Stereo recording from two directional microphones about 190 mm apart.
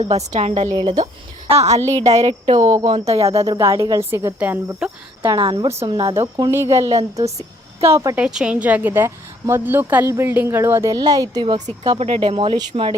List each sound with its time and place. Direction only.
0.0 s a woman's voice: 35° right (ahead or behind)
0.7 s a woman's voice: 20° right (ahead or behind)
1.5 s a woman's voice: 35° right (ahead or behind)
2.6 s speech: 15° right (ahead or behind)
2.9 s a woman's voice: 35° right (ahead or behind)
3.4 s speech: 15° right (ahead or behind)
5.4 s a woman's voice: 25° right (ahead or behind)
8.2 s a woman's voice: 5° right (ahead or behind); by 12.9 s 25° right (ahead or behind)